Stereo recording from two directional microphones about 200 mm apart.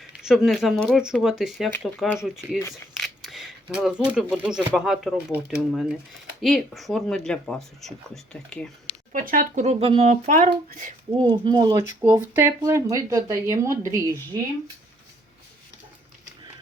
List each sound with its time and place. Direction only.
0.2 s speech: 5° right (ahead or behind)
9.1 s speech: 45° right (ahead or behind)
11.1 s speech: 25° right (ahead or behind)